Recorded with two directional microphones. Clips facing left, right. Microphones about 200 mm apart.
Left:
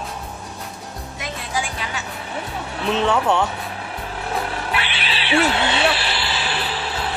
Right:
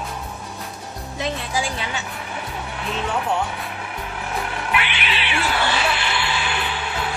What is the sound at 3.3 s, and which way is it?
Speech, 75° left (ahead or behind).